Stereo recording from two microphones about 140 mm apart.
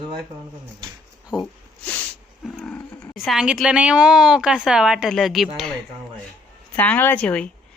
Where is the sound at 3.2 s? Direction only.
5° right (ahead or behind).